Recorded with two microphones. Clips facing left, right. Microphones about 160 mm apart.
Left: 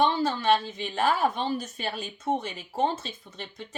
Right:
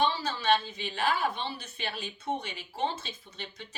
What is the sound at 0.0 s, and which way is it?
A woman's voice, 50° left (ahead or behind).